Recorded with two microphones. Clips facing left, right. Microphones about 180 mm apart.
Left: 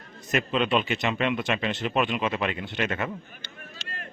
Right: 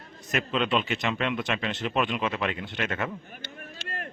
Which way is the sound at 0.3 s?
5° left (ahead or behind).